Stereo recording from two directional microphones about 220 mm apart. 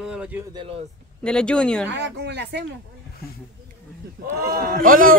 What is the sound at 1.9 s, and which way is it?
Speech, 50° right (ahead or behind).